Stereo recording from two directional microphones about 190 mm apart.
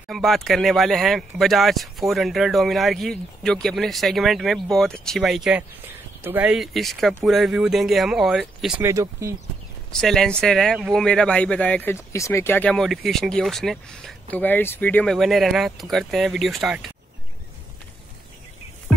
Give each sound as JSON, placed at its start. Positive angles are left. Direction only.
{"t": 0.1, "sound": "speech", "side_deg": 0}
{"t": 8.8, "sound": "speech", "side_deg": -15}
{"t": 9.9, "sound": "speech", "side_deg": 0}